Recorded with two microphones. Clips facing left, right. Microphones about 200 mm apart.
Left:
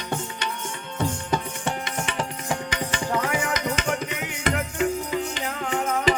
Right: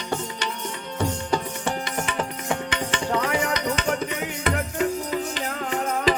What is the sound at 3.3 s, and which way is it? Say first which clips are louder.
Music: right 2 dB; 35° right (ahead or behind).